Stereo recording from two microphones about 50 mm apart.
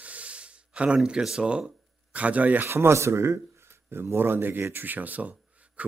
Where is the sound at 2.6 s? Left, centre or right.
Right.